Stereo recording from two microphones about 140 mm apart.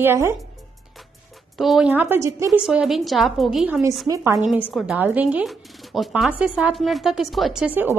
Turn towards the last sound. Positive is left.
turn(degrees=-5)  # may be behind; listen again after turning